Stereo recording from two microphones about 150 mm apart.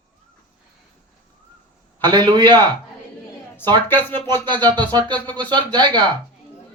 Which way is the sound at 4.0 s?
15° left (ahead or behind).